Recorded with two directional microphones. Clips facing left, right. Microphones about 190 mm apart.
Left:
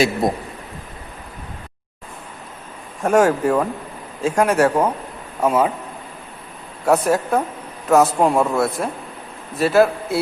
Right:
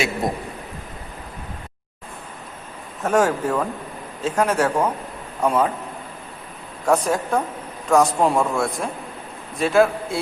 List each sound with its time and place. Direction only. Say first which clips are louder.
0.2 s a man's voice: left 4 dB; 35° left (ahead or behind)
3.0 s speech: left 4 dB; 10° left (ahead or behind)
6.8 s a man's voice: left 3 dB; 5° left (ahead or behind)